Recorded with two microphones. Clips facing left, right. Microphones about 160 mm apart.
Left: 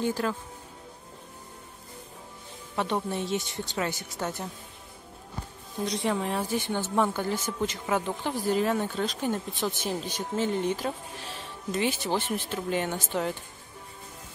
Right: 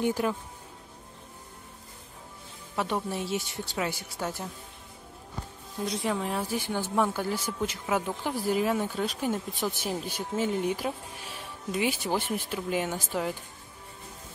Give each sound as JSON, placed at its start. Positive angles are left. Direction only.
{"t": 0.0, "sound": "speech", "side_deg": -15}
{"t": 2.7, "sound": "a woman's voice", "side_deg": -5}
{"t": 5.9, "sound": "speech", "side_deg": 0}